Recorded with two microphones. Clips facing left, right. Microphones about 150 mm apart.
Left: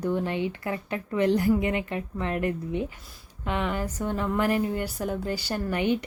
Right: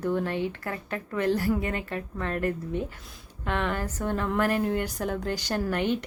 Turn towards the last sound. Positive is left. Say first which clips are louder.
# left 1 dB
turn(degrees=10)  # may be behind; listen again after turning